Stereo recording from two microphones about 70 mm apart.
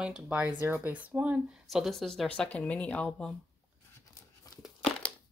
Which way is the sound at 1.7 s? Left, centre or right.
Centre.